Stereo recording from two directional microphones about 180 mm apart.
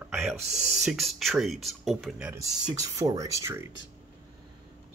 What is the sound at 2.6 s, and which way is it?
Speech, 20° right (ahead or behind).